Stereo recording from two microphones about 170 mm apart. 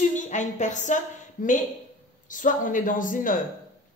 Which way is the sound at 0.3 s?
45° left (ahead or behind).